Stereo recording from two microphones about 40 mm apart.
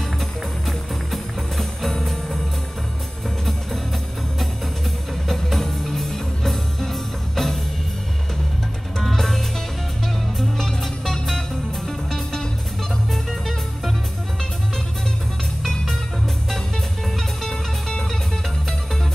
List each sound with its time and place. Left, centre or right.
0.7 s music: centre
5.3 s music: centre
9.0 s music: centre
10.6 s music: centre
13.1 s music: centre
15.6 s music: centre
17.5 s music: centre